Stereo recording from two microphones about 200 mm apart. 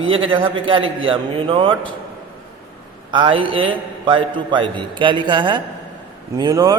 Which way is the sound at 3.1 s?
25° right (ahead or behind).